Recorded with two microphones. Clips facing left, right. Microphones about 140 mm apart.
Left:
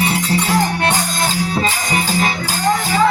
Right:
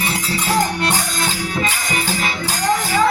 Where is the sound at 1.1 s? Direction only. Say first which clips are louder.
Left 3 dB; 35° left (ahead or behind).